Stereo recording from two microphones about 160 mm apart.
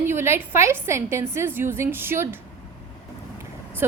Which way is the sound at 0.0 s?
15° right (ahead or behind).